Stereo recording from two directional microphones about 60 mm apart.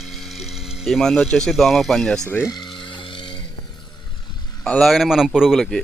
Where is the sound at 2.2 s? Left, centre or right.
Left.